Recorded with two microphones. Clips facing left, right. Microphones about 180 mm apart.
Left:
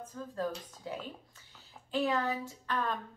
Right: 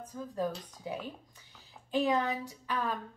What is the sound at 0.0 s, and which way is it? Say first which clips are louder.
Speech: right 2 dB; 15° right (ahead or behind).